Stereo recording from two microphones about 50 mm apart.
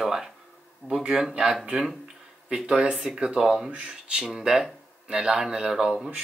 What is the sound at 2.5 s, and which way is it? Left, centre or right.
Speech, centre.